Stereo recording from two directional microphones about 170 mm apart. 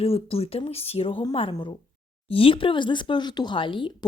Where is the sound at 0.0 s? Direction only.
35° left (ahead or behind).